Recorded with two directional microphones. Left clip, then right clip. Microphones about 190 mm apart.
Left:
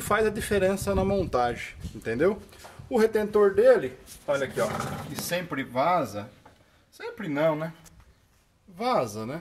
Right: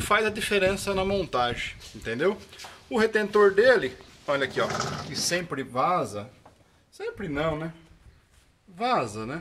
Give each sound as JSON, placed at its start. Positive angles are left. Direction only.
{"t": 0.0, "sound": "speech", "side_deg": 25}
{"t": 5.3, "sound": "speech", "side_deg": -10}
{"t": 8.7, "sound": "speech", "side_deg": 5}